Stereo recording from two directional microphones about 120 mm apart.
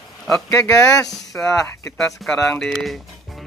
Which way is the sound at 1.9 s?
5° left (ahead or behind).